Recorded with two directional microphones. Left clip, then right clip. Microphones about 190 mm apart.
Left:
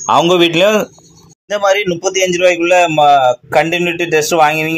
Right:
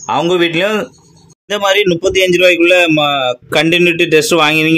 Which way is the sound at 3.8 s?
70° right (ahead or behind).